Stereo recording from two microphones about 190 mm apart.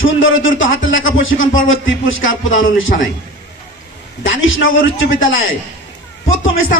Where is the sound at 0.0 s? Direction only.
90° left.